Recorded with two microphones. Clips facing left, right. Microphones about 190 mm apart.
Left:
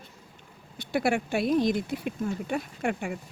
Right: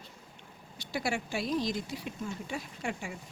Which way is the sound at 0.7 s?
55° left (ahead or behind).